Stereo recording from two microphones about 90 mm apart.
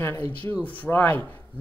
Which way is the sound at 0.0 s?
30° left (ahead or behind).